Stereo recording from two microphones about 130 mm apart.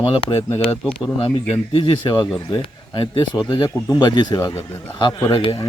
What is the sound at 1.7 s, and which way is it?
Speech, 40° left (ahead or behind).